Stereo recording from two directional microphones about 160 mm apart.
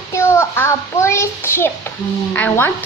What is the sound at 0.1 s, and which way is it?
A child's voice, 15° left (ahead or behind).